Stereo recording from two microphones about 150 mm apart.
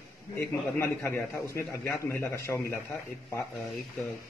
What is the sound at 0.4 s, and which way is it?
A man's voice, 15° left (ahead or behind).